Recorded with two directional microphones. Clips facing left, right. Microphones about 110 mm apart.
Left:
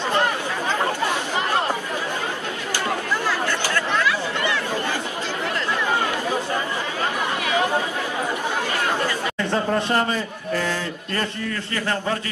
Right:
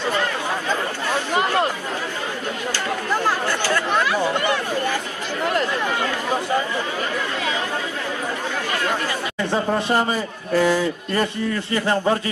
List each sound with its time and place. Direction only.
9.5 s a man's voice: 10° right (ahead or behind)